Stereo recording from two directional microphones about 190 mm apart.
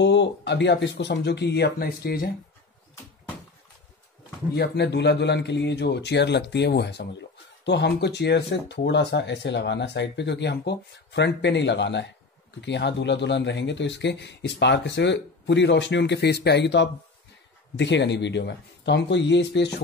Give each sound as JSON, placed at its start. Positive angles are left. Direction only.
{"t": 0.0, "sound": "a man's voice", "side_deg": 70}
{"t": 4.6, "sound": "a man's voice", "side_deg": 65}